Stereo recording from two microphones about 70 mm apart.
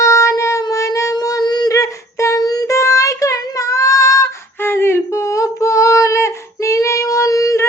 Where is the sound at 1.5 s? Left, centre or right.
Left.